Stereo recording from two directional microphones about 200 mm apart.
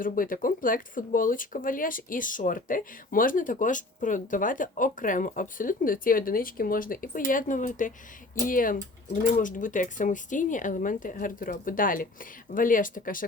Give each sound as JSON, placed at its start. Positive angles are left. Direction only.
{"t": 0.0, "sound": "speech", "side_deg": 45}